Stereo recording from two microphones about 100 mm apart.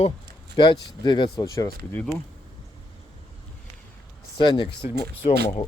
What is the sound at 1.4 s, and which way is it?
Speech, 35° left (ahead or behind).